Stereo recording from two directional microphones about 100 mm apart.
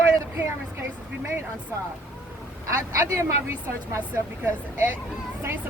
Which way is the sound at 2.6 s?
30° right (ahead or behind).